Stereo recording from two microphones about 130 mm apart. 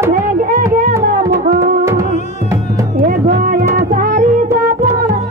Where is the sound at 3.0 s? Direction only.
90° right.